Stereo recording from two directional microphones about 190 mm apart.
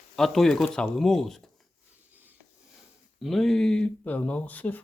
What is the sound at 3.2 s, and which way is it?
Speech, centre (ahead or behind).